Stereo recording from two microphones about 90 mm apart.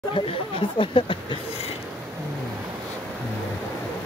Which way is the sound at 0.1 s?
75° left (ahead or behind).